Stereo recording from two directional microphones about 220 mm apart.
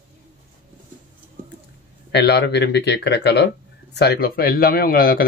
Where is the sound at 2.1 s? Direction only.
50° left (ahead or behind).